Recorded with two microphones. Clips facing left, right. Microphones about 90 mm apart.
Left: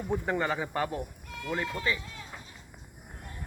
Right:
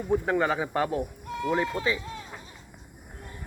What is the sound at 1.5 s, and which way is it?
Speech, 20° right (ahead or behind).